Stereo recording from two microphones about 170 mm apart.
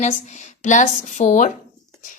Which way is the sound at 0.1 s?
45° left (ahead or behind).